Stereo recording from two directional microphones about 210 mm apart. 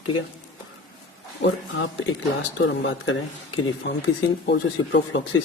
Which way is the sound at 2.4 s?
60° left (ahead or behind).